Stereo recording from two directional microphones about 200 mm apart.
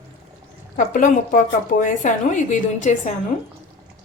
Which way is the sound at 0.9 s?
40° left (ahead or behind).